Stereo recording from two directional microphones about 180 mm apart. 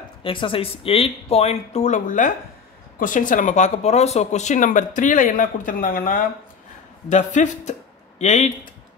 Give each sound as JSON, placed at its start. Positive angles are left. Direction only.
{"t": 0.2, "sound": "speech", "side_deg": 30}